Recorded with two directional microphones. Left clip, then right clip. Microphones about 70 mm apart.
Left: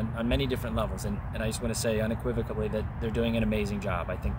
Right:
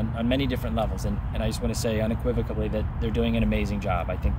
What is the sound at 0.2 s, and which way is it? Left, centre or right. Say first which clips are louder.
Speech: right 3 dB; left.